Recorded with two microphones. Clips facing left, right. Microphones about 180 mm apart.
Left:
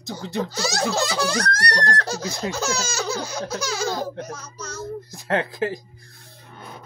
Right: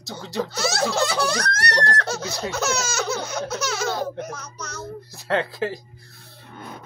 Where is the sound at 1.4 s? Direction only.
30° left (ahead or behind).